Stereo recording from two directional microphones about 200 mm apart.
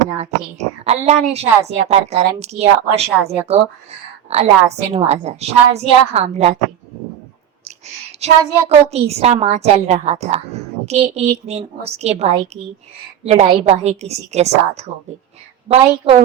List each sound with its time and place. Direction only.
0.0 s a woman's voice: 35° right (ahead or behind)
8.2 s a woman's voice: 30° right (ahead or behind)